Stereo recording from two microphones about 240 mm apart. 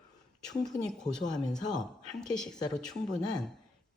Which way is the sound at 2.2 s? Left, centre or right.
Centre.